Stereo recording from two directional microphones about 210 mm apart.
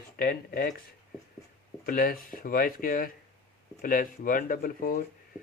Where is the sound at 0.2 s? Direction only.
45° left (ahead or behind).